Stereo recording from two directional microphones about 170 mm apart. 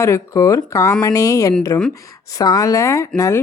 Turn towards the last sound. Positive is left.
turn(degrees=15)  # may be behind; listen again after turning